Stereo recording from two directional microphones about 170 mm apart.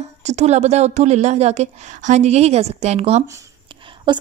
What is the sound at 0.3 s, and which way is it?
Speech, 40° right (ahead or behind).